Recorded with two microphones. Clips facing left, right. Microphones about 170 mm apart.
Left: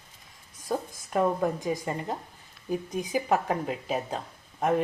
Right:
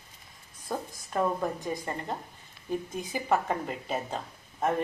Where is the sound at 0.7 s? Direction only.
15° left (ahead or behind).